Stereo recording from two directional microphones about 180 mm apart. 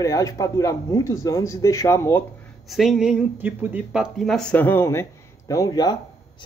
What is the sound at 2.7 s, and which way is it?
Speech, centre (ahead or behind).